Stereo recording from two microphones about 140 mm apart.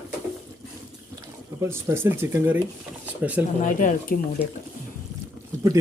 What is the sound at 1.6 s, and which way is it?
Speech, 20° right (ahead or behind).